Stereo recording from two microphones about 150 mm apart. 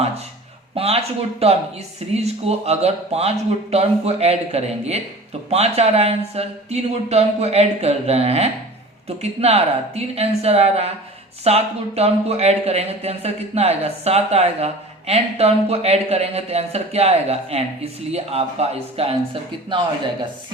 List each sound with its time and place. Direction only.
0.8 s speech: 40° right (ahead or behind)